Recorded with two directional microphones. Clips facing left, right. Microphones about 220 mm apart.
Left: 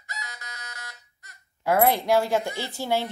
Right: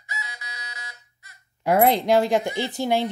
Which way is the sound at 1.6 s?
20° right (ahead or behind).